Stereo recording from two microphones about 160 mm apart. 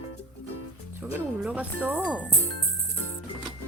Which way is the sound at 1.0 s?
10° right (ahead or behind).